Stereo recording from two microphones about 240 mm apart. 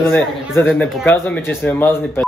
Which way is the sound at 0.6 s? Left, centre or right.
Centre.